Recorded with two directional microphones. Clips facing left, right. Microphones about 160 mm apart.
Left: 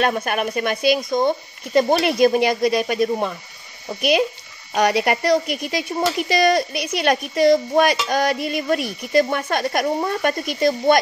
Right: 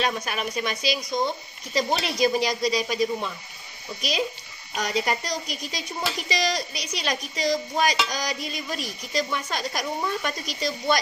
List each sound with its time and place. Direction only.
0.0 s speech: 55° left (ahead or behind)
4.7 s speech: 70° left (ahead or behind)